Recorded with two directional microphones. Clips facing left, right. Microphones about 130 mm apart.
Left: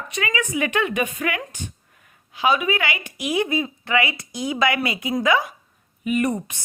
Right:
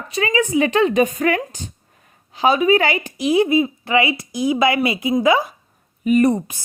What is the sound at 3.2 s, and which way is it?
Speech, 25° right (ahead or behind).